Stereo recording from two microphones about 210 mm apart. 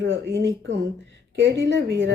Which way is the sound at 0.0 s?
65° right (ahead or behind).